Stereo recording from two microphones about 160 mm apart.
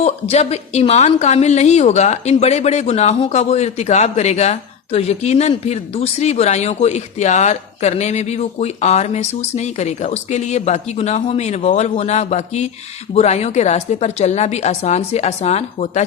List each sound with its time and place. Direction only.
0.0 s a woman's voice: 40° left (ahead or behind)